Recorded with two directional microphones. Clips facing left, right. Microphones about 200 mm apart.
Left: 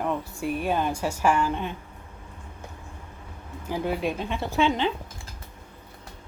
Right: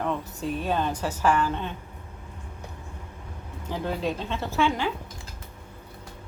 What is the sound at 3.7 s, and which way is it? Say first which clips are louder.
A woman's voice: left 2 dB; 15° left (ahead or behind).